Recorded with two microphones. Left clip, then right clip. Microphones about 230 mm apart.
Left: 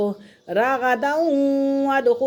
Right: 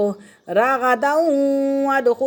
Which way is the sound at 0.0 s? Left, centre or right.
Centre.